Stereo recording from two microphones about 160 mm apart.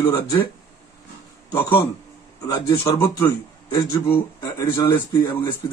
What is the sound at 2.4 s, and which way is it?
Speech, 25° left (ahead or behind).